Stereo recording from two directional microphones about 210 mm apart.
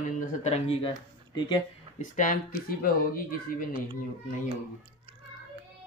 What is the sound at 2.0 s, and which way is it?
Speech, 40° left (ahead or behind).